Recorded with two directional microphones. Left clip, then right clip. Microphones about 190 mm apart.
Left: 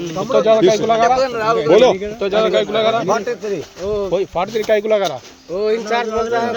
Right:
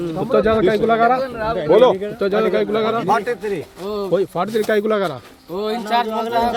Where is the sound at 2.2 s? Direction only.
65° right (ahead or behind).